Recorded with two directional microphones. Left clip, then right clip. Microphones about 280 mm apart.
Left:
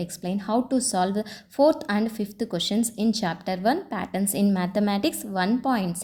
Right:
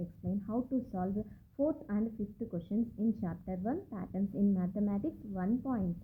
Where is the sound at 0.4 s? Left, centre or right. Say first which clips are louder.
Left 13 dB; left.